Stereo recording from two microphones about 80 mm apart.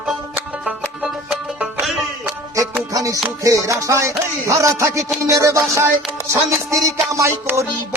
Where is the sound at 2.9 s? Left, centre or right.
Right.